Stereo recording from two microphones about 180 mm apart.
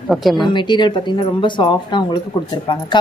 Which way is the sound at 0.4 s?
25° left (ahead or behind).